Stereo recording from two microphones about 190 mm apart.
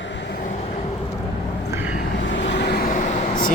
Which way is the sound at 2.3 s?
65° left (ahead or behind).